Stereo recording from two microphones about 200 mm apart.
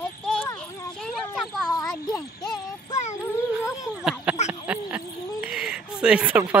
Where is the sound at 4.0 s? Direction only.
5° right (ahead or behind).